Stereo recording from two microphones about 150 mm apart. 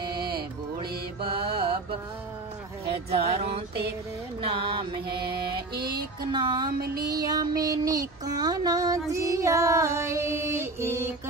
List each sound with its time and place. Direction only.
0.7 s mantra: 35° right (ahead or behind)
3.3 s music: 45° right (ahead or behind)
6.3 s music: 25° right (ahead or behind)
6.8 s music: 90° right
7.1 s music: 25° right (ahead or behind)